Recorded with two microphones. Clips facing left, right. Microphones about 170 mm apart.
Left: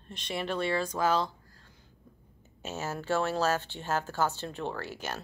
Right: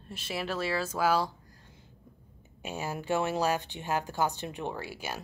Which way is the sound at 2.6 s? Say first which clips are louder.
Even; 15° right (ahead or behind).